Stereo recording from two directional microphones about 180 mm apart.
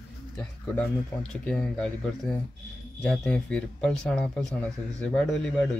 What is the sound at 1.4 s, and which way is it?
Speech, 5° left (ahead or behind).